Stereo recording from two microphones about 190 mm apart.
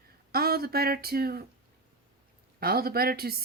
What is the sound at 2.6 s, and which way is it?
Speech, 50° right (ahead or behind).